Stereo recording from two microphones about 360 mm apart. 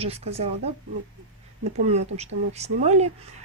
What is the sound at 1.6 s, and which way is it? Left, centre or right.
Speech, centre.